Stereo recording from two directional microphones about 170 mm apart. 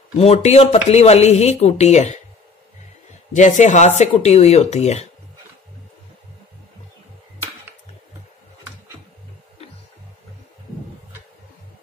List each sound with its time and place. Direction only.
0.2 s speech: 40° left (ahead or behind)
3.3 s speech: 45° left (ahead or behind)